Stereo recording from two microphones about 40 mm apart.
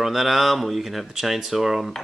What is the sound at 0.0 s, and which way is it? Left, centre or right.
Speech, centre.